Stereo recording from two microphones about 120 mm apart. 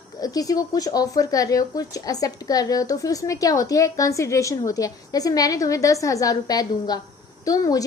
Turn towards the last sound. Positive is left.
turn(degrees=30)  # may be behind; listen again after turning